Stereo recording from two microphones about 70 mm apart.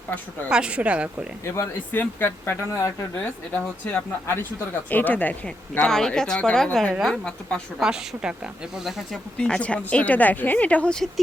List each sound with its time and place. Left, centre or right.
0.5 s speech: centre
1.5 s speech: left
2.0 s speech: left
5.8 s speech: centre
7.8 s speech: centre
9.4 s speech: centre